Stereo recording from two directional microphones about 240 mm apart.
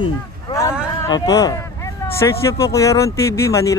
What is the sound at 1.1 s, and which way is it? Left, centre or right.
Speech, centre.